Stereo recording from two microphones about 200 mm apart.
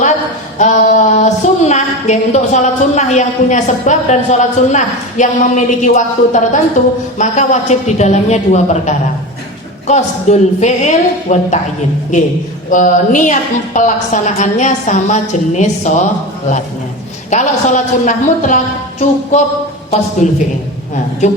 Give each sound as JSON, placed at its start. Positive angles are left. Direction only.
{"t": 0.6, "sound": "a woman's voice", "side_deg": 35}
{"t": 12.7, "sound": "a woman's voice", "side_deg": 40}
{"t": 17.3, "sound": "a woman's voice", "side_deg": 40}